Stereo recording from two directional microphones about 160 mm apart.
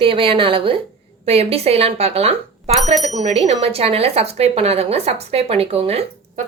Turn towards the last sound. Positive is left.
turn(degrees=-40)  # may be behind; listen again after turning